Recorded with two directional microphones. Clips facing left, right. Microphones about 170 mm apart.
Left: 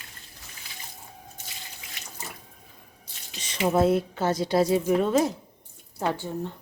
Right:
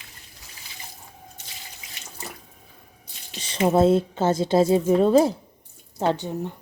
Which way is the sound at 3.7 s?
25° right (ahead or behind).